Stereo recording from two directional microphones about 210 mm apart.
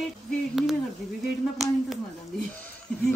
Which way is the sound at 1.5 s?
Centre (ahead or behind).